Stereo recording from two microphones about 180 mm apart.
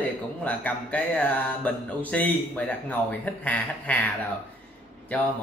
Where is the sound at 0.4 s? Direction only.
10° left (ahead or behind).